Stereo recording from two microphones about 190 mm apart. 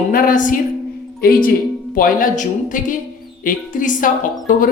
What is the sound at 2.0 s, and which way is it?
A woman's voice, 45° left (ahead or behind).